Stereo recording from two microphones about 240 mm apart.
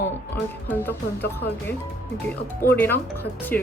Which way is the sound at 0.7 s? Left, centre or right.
Centre.